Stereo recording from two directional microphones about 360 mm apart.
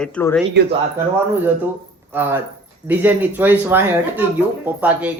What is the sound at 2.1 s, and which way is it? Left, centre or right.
A man's voice, centre.